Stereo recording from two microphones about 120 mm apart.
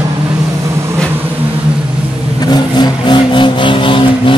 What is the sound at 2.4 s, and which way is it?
Vehicle, 35° left (ahead or behind).